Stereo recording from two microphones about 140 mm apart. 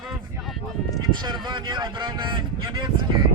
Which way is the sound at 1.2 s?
30° right (ahead or behind).